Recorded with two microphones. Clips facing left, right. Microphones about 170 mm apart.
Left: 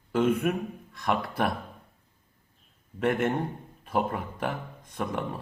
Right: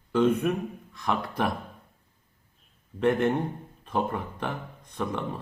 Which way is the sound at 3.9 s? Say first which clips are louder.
Even; 5° left (ahead or behind).